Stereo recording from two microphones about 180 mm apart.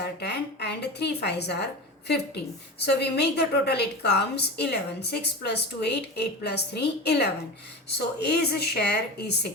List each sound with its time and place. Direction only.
0.0 s a woman's voice: 65° left (ahead or behind)